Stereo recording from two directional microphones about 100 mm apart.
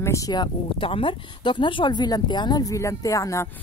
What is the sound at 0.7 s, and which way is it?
Speech, 65° left (ahead or behind).